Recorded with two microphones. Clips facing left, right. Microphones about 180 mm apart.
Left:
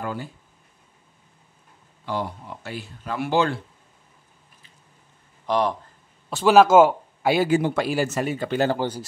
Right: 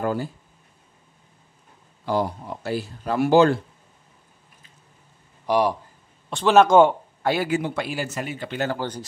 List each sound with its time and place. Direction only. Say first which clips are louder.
0.0 s a sound: right 6 dB; 40° right (ahead or behind)
2.0 s speech: right 5 dB; 40° right (ahead or behind)
5.5 s speech: right 2 dB; 10° right (ahead or behind)
6.3 s speech: left 1 dB; 5° left (ahead or behind)
7.6 s speech: left 5 dB; 45° left (ahead or behind)
8.7 s speech: left 3 dB; 10° left (ahead or behind)